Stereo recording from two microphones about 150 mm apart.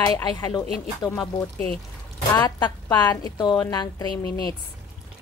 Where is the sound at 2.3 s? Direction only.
30° left (ahead or behind).